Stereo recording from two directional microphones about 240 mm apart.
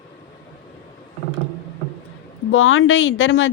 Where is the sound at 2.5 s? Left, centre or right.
Left.